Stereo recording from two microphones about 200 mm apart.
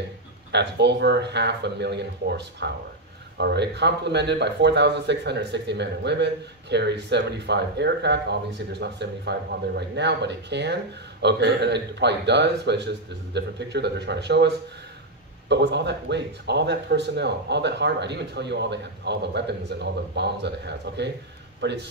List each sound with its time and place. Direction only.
0.5 s speech: 60° right (ahead or behind)